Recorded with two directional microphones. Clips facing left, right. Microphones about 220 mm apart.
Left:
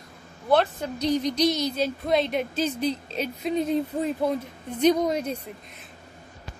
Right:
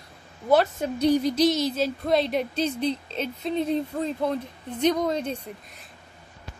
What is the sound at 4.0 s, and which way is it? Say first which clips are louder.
A woman's voice: left 1 dB; 10° left (ahead or behind).